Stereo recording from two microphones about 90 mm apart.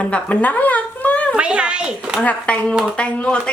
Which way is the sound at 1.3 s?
10° right (ahead or behind).